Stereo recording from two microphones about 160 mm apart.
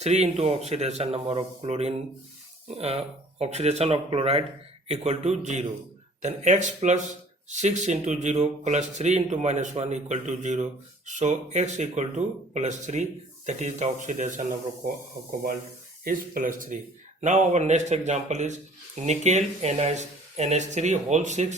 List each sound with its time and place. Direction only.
0.0 s speech: 40° right (ahead or behind)
14.8 s speech: 65° right (ahead or behind); by 21.4 s 45° right (ahead or behind)